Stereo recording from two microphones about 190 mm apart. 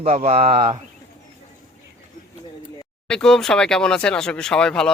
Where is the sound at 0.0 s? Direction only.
35° right (ahead or behind).